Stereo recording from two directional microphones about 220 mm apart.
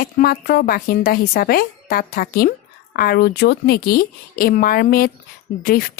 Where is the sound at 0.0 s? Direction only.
45° left (ahead or behind).